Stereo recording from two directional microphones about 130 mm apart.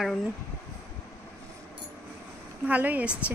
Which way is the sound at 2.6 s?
15° right (ahead or behind).